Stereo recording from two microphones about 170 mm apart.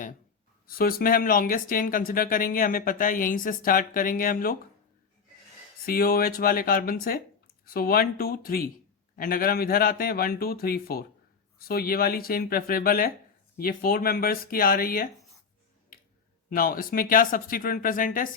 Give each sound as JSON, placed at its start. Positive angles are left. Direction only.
{"t": 0.7, "sound": "speech", "side_deg": 60}
{"t": 5.8, "sound": "speech", "side_deg": 60}
{"t": 16.6, "sound": "speech", "side_deg": 55}